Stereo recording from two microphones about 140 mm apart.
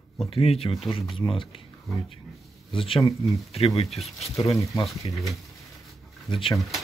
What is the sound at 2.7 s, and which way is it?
Speech, 40° left (ahead or behind).